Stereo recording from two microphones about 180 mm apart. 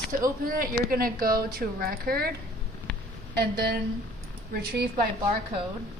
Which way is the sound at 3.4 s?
60° right (ahead or behind).